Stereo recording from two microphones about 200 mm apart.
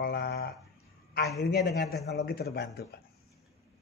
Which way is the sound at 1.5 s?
55° left (ahead or behind).